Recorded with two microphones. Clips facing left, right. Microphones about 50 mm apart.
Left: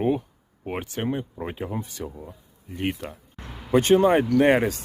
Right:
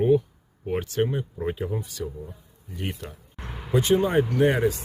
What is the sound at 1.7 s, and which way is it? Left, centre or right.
Speech, left.